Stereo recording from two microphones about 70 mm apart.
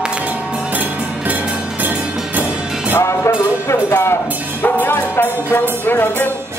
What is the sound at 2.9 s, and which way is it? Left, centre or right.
Music, left.